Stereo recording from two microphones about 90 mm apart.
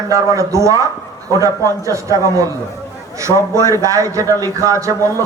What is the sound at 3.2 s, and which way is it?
A man's voice, 35° right (ahead or behind).